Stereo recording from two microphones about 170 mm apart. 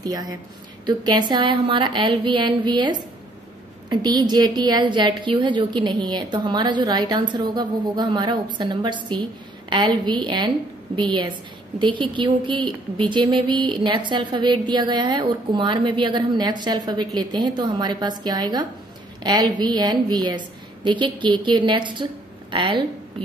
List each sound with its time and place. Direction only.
0.0 s a woman's voice: 20° right (ahead or behind)